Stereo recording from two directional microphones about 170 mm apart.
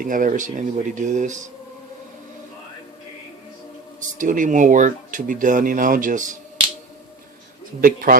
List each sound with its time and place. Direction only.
0.0 s speech: 50° right (ahead or behind)
4.2 s speech: 50° right (ahead or behind)
7.8 s a man's voice: 55° right (ahead or behind)